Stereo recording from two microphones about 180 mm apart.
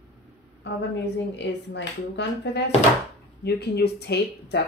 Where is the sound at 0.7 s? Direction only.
70° left (ahead or behind).